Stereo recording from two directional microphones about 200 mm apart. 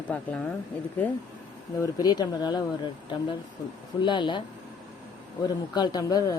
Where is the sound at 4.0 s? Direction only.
25° left (ahead or behind).